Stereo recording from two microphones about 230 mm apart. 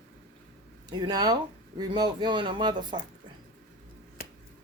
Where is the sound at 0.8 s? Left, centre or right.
Centre.